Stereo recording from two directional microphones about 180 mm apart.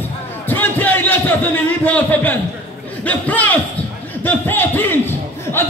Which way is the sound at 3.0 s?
10° left (ahead or behind).